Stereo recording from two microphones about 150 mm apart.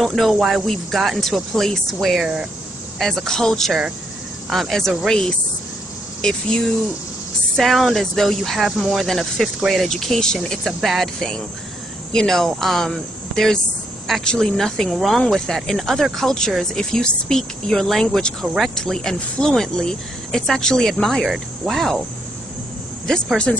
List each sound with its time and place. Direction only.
0.0 s speech: centre (ahead or behind)
23.0 s speech: 5° left (ahead or behind)